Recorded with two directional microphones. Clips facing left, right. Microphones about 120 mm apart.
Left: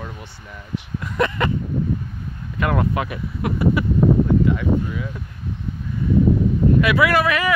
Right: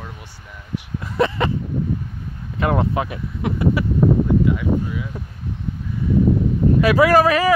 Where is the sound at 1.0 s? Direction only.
30° right (ahead or behind).